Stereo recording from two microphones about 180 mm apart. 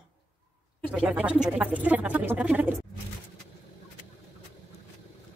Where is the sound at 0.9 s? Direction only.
5° right (ahead or behind).